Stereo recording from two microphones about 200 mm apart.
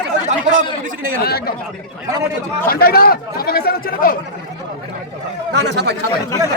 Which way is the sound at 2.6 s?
50° left (ahead or behind).